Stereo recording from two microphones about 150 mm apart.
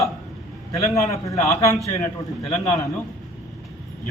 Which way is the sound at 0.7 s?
20° left (ahead or behind).